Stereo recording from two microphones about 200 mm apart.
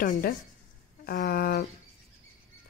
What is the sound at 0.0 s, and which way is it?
A woman's voice, 40° left (ahead or behind).